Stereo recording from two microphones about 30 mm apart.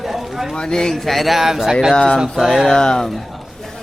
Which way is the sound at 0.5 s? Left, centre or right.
Left.